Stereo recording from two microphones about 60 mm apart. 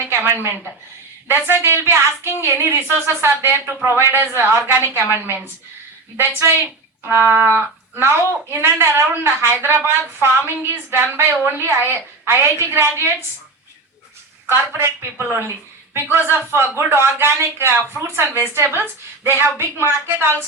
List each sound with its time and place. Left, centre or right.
0.1 s a sound: right
1.3 s a woman's voice: right
14.4 s a woman's voice: right